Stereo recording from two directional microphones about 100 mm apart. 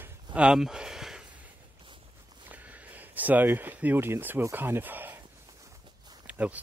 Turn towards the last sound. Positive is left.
turn(degrees=-15)  # may be behind; listen again after turning